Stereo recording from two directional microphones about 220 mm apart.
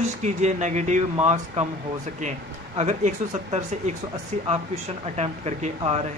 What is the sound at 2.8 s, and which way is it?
Speech, 30° right (ahead or behind).